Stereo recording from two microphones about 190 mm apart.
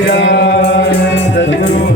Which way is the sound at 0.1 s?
65° left (ahead or behind).